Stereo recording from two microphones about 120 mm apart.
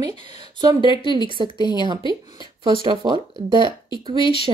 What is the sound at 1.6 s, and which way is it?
Speech, 35° left (ahead or behind).